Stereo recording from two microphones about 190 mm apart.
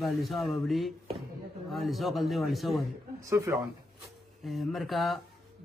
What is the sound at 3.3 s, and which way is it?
Speech, 15° right (ahead or behind).